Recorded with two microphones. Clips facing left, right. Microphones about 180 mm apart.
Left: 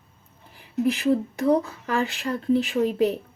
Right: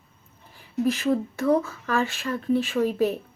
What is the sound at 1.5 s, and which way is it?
Speech, 15° left (ahead or behind).